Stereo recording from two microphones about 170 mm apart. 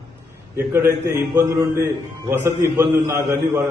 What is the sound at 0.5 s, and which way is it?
A man's voice, 15° right (ahead or behind).